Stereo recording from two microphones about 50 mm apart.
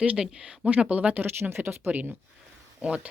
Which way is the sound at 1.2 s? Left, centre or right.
Right.